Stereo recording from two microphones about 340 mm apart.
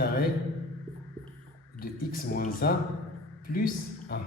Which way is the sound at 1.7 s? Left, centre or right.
Left.